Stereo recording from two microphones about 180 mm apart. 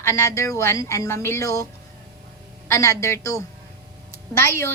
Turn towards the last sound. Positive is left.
turn(degrees=15)  # may be behind; listen again after turning